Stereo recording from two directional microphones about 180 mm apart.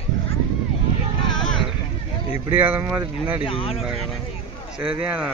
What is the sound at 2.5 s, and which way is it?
Speech, 10° right (ahead or behind).